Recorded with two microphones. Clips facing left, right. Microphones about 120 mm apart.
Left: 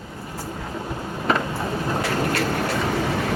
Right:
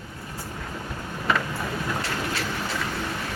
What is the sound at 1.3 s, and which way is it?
Boat, 30° left (ahead or behind).